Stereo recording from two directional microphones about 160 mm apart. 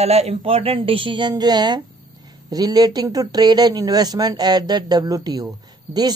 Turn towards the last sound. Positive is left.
turn(degrees=-25)  # may be behind; listen again after turning